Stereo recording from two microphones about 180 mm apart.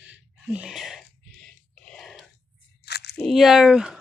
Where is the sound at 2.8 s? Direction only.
65° left (ahead or behind).